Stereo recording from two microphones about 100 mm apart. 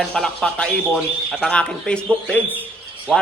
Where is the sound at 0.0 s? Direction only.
5° left (ahead or behind).